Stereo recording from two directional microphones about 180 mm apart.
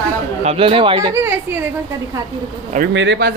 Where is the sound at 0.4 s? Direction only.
35° right (ahead or behind).